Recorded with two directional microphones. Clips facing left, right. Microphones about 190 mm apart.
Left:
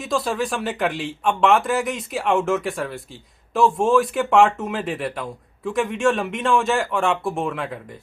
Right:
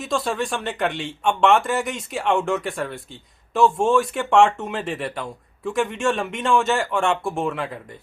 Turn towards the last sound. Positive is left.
turn(degrees=0)  # may be behind; listen again after turning